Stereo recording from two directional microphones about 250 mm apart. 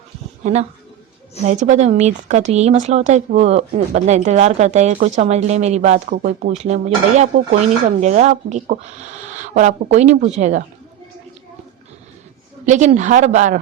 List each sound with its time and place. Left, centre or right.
0.4 s speech: right
12.6 s speech: right